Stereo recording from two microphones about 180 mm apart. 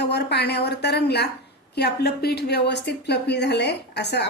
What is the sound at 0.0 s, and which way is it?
A woman's voice, 65° left (ahead or behind).